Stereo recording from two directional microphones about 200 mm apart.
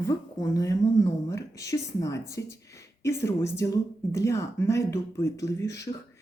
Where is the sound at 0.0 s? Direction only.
15° left (ahead or behind).